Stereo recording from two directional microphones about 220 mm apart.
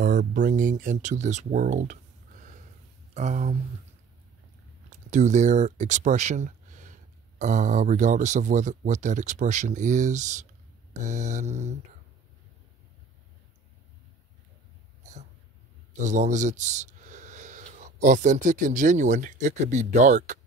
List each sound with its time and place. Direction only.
0.0 s speech: 35° right (ahead or behind)
3.2 s speech: 30° right (ahead or behind)
4.8 s speech: 35° right (ahead or behind)
16.0 s speech: 35° right (ahead or behind)